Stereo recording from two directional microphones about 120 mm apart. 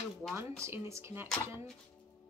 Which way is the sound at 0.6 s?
25° right (ahead or behind).